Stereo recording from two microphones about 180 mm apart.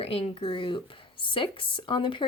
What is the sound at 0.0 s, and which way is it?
Speech, 30° left (ahead or behind).